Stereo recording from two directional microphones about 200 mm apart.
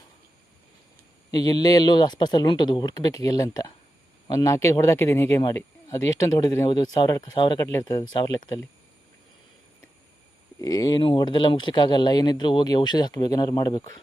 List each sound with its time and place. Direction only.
1.3 s speech: 20° left (ahead or behind)
10.6 s speech: 20° left (ahead or behind)